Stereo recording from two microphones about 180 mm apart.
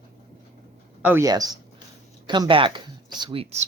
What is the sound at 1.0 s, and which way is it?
Speech, 15° right (ahead or behind).